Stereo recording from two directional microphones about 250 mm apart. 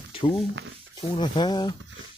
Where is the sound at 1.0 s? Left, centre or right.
Centre.